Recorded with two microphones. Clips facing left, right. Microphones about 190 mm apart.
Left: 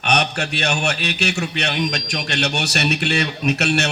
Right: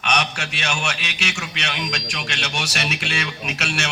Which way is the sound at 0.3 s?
35° left (ahead or behind).